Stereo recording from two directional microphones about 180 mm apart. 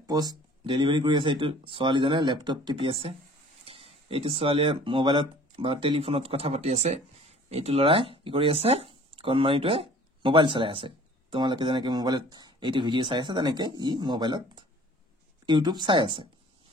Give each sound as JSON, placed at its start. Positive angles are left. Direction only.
{"t": 0.0, "sound": "speech", "side_deg": -20}